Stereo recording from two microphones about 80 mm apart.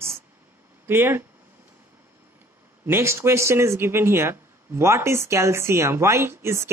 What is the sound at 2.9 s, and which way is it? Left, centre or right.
A woman's voice, right.